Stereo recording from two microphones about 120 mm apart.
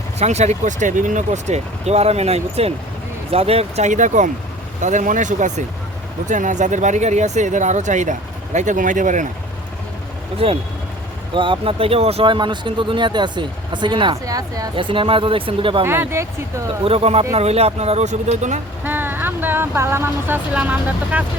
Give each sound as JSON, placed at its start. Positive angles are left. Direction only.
{"t": 0.2, "sound": "speech", "side_deg": -70}
{"t": 10.3, "sound": "speech", "side_deg": -50}
{"t": 14.3, "sound": "speech", "side_deg": -30}
{"t": 14.8, "sound": "speech", "side_deg": -45}
{"t": 15.8, "sound": "speech", "side_deg": -20}
{"t": 16.8, "sound": "speech", "side_deg": -55}
{"t": 18.9, "sound": "speech", "side_deg": -15}